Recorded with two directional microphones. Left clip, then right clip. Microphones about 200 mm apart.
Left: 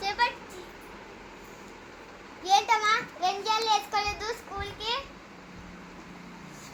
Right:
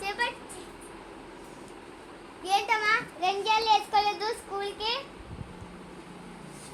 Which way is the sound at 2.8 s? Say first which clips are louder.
Even; 20° right (ahead or behind).